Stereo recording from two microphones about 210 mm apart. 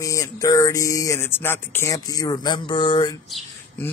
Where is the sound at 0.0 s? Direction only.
15° left (ahead or behind).